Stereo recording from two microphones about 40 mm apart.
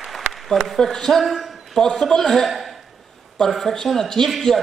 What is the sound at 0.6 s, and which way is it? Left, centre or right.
Speech, centre.